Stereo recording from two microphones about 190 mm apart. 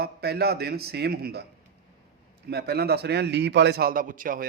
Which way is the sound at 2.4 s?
60° right (ahead or behind).